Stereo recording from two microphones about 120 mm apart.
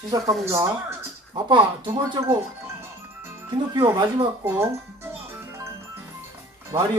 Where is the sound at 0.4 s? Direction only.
25° right (ahead or behind).